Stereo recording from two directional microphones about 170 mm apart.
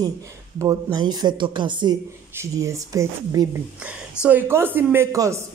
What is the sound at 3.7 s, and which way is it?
A man's voice, 5° right (ahead or behind).